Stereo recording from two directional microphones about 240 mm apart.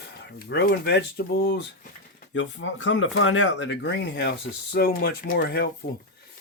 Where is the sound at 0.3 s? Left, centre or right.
Left.